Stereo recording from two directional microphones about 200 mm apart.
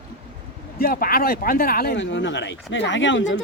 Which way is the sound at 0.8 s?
45° left (ahead or behind).